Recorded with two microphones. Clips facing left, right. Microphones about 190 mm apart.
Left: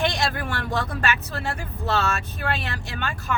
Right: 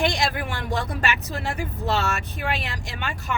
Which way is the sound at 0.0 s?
15° right (ahead or behind).